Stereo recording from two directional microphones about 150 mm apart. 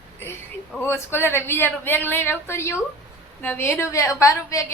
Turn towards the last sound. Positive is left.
turn(degrees=20)  # may be behind; listen again after turning